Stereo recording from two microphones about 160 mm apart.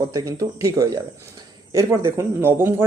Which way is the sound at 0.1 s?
20° right (ahead or behind).